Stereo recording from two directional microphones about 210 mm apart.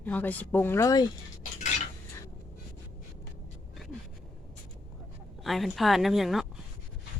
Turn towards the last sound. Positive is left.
turn(degrees=0)  # may be behind; listen again after turning